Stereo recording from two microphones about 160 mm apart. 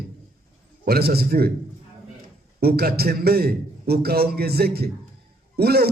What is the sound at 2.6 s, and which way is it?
A man's voice, 75° right (ahead or behind).